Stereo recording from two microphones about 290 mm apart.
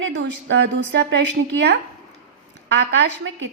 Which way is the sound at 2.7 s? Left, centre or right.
Right.